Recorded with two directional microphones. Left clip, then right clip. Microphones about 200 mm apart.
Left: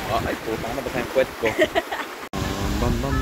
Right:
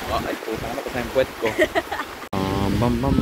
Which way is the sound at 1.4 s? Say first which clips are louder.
Even; 25° right (ahead or behind).